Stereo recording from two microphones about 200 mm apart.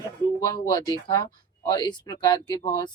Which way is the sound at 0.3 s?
20° left (ahead or behind).